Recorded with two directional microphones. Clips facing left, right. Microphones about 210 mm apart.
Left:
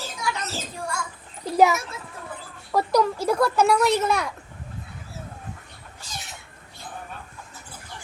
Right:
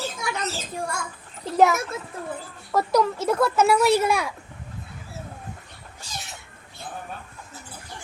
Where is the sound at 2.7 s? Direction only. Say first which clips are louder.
Even; centre (ahead or behind).